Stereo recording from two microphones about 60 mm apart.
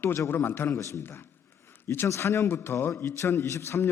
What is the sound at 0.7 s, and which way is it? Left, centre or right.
A man's voice, left.